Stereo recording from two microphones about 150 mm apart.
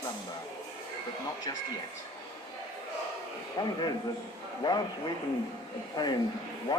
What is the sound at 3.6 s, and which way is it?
Speech, 25° left (ahead or behind).